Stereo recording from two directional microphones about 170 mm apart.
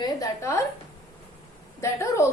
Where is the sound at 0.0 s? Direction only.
20° left (ahead or behind).